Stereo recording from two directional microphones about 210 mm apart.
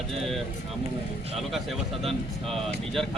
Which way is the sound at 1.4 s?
Centre (ahead or behind).